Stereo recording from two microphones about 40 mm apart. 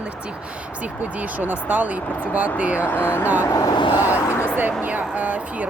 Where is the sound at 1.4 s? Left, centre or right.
Right.